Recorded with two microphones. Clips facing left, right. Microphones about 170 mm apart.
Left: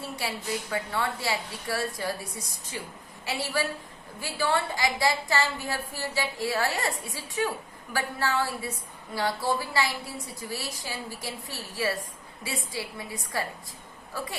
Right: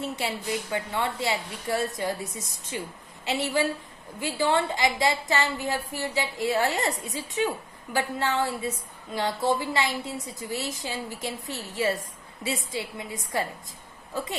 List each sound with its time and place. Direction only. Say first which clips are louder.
0.0 s a woman's voice: right 3 dB; 20° right (ahead or behind)